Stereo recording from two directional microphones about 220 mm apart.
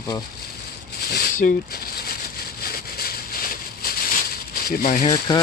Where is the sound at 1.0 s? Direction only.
45° left (ahead or behind).